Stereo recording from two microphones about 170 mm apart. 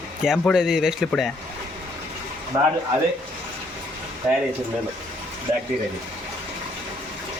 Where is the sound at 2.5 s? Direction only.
20° right (ahead or behind).